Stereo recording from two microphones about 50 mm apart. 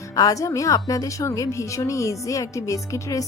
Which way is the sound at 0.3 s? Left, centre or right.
Left.